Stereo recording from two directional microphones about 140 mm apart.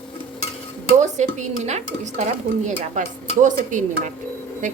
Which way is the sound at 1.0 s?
55° right (ahead or behind).